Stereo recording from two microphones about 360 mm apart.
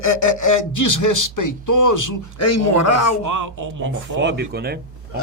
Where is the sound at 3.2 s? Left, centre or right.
Right.